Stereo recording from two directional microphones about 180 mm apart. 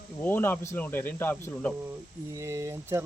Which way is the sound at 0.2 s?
10° left (ahead or behind).